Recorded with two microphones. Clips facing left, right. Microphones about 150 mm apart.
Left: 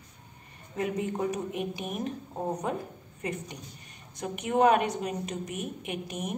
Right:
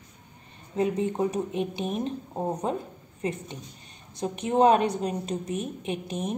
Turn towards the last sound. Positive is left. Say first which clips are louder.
# right 4 dB
turn(degrees=-25)  # may be behind; listen again after turning